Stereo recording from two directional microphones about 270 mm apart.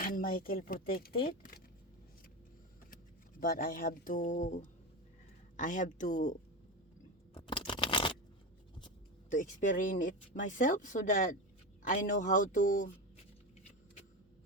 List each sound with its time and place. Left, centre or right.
0.0 s speech: left
3.4 s speech: left
7.3 s a sound: centre
9.3 s speech: left